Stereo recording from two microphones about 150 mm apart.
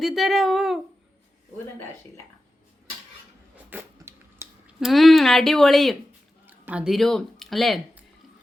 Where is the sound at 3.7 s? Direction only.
15° right (ahead or behind).